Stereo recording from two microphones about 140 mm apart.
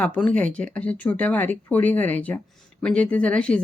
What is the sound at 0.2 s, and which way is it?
Speech, 10° left (ahead or behind).